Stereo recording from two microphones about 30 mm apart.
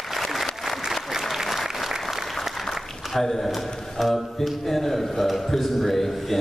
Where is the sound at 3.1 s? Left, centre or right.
Centre.